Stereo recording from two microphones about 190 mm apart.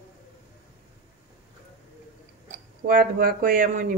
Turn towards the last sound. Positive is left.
turn(degrees=-50)  # may be behind; listen again after turning